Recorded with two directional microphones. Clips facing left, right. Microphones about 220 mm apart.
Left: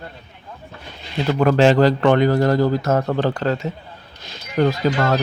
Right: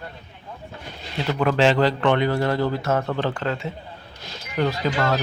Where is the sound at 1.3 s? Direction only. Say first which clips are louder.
Left 5 dB; 45° left (ahead or behind).